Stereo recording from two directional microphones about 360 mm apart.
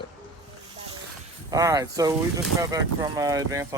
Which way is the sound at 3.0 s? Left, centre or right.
Centre.